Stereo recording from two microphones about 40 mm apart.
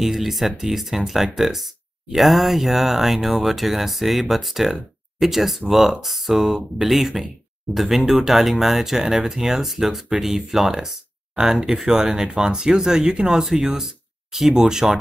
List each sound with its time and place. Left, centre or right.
0.0 s speech: centre